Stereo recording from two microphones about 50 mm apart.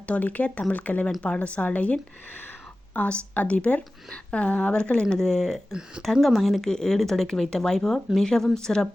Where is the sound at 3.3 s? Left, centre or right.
Left.